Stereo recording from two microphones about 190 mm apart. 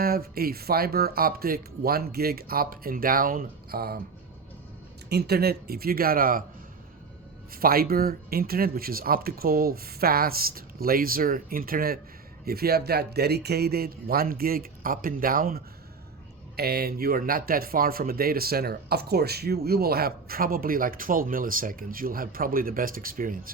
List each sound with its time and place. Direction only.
0.0 s speech: 50° right (ahead or behind)
5.0 s speech: 60° right (ahead or behind)
7.5 s speech: 50° right (ahead or behind)